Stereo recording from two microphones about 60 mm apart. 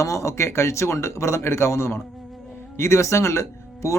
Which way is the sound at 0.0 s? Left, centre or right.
Left.